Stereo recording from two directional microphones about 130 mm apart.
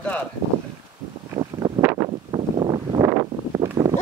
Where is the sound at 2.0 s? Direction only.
35° right (ahead or behind).